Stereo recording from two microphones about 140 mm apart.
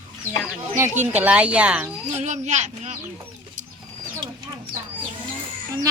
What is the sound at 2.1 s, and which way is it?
Speech, 55° right (ahead or behind).